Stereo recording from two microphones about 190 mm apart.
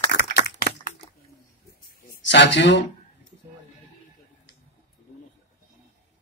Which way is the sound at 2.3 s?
70° left (ahead or behind).